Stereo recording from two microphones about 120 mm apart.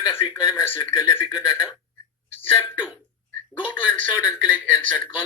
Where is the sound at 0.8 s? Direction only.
35° left (ahead or behind).